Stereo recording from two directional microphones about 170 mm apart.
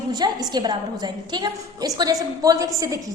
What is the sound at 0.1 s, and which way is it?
A woman's voice, 25° right (ahead or behind).